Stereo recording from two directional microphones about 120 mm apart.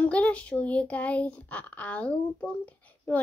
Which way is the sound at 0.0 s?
10° left (ahead or behind).